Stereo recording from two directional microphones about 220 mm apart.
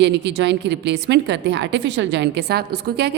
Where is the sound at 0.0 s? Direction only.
50° right (ahead or behind).